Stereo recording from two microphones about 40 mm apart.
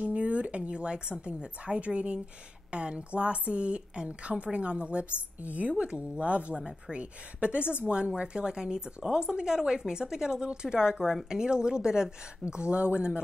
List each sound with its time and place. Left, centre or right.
0.0 s a woman's voice: right
5.4 s a woman's voice: right
5.7 s a woman's voice: right
12.7 s a woman's voice: right